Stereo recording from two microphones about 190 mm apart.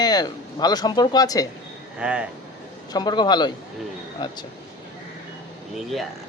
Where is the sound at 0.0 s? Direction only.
20° left (ahead or behind).